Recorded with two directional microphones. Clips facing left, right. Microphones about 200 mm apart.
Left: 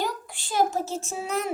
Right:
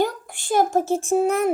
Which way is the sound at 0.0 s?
50° right (ahead or behind).